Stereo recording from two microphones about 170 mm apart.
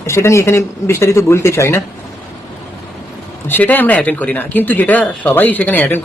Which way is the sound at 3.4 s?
10° left (ahead or behind).